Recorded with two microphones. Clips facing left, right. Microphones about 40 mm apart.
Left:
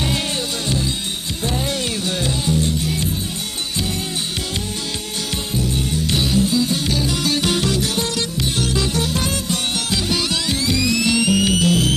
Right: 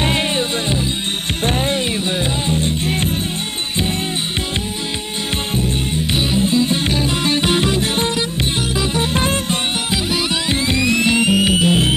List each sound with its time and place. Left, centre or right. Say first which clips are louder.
0.0 s music: right 4 dB; right
1.4 s music: right 4 dB; right
6.1 s music: right 2 dB; right
8.5 s music: right 1 dB; right
9.1 s music: right 4 dB; right